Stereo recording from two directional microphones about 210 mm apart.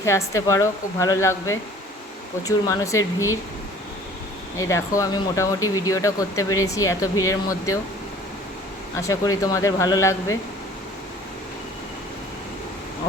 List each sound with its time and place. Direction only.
0.0 s speech: 15° left (ahead or behind)
4.5 s speech: 15° left (ahead or behind)
9.0 s speech: 15° left (ahead or behind)